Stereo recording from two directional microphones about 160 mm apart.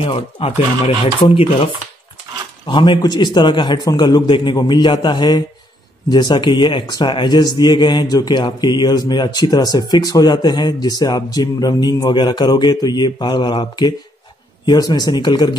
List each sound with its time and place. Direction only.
0.0 s speech: 35° left (ahead or behind)